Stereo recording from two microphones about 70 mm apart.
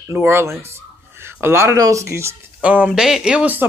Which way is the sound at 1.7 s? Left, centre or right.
Right.